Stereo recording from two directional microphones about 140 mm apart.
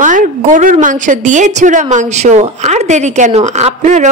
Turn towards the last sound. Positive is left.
turn(degrees=-55)  # may be behind; listen again after turning